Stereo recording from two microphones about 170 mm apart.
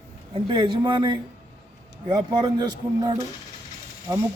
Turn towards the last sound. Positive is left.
turn(degrees=-20)  # may be behind; listen again after turning